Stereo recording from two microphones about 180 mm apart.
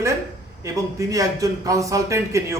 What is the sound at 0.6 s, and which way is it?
A man's voice, 20° right (ahead or behind).